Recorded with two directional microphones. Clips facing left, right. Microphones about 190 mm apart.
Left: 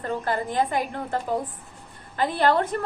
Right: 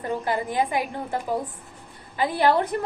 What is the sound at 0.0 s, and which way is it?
A woman's voice, 15° right (ahead or behind).